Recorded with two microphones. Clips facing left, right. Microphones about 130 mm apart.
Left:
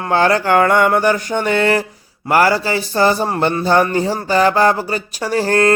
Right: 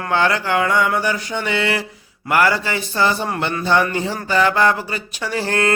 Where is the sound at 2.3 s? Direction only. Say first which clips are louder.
Left 4 dB; 35° left (ahead or behind).